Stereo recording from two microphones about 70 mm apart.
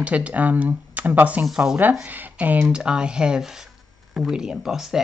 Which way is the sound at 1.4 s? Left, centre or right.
Centre.